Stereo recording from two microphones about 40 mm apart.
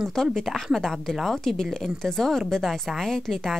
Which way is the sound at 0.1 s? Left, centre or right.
Centre.